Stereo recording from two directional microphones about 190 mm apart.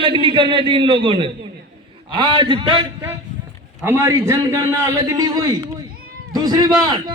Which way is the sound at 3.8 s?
15° right (ahead or behind).